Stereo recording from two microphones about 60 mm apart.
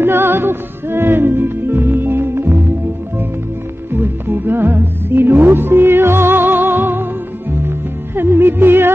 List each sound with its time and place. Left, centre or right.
0.0 s music: right
3.9 s music: right
8.2 s music: right